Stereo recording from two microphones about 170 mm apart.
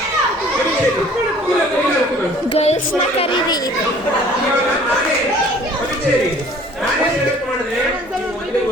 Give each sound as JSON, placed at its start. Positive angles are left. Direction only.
{"t": 2.6, "sound": "speech", "side_deg": 40}